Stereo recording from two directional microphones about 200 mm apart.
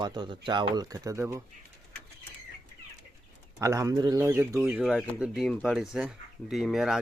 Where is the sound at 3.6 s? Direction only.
15° right (ahead or behind).